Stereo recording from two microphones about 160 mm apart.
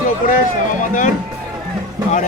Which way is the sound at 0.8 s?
55° left (ahead or behind).